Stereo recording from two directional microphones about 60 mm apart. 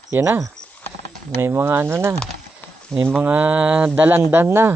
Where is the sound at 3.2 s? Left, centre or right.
Right.